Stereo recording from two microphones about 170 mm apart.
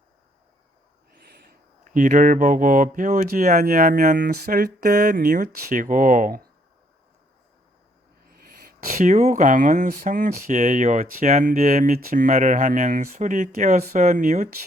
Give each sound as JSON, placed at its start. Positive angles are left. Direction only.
{"t": 1.8, "sound": "speech", "side_deg": -50}
{"t": 3.6, "sound": "speech", "side_deg": -60}
{"t": 8.4, "sound": "speech", "side_deg": -65}